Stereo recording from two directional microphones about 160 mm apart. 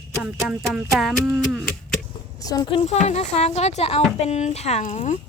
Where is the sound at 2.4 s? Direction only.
25° left (ahead or behind); by 5.2 s 45° left (ahead or behind).